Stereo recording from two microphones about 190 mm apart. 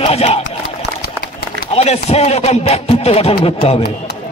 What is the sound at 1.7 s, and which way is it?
Speech, 35° left (ahead or behind).